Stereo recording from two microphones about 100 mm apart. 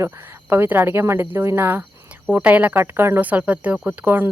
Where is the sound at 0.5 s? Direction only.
20° right (ahead or behind).